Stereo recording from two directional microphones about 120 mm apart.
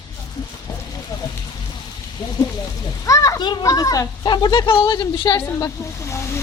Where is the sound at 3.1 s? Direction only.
30° left (ahead or behind).